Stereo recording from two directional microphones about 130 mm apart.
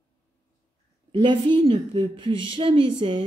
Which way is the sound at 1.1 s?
40° right (ahead or behind).